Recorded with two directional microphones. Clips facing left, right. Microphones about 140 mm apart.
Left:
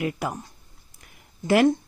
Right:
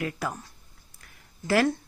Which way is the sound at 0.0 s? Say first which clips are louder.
Left 3 dB; 20° left (ahead or behind).